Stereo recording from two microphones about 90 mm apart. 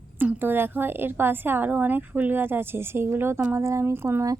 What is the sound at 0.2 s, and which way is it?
A woman's voice, 20° right (ahead or behind).